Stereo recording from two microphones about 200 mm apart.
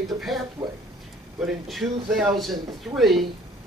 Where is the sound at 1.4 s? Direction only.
Centre (ahead or behind).